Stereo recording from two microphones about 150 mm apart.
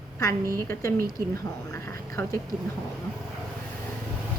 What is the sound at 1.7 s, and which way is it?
Speech, 20° left (ahead or behind).